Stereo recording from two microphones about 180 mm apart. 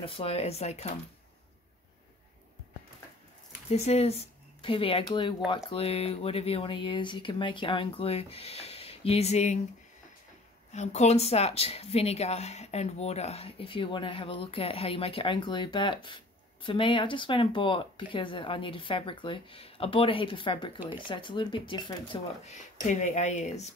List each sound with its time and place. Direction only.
0.0 s speech: 30° left (ahead or behind)
3.7 s speech: 35° left (ahead or behind)
10.7 s speech: 40° left (ahead or behind)
22.4 s speech: 40° left (ahead or behind)